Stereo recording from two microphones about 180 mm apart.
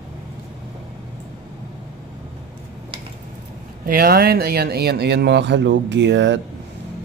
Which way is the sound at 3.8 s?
55° right (ahead or behind).